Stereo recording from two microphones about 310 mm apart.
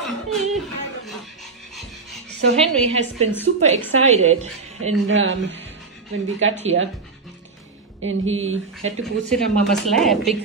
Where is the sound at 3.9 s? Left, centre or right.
Right.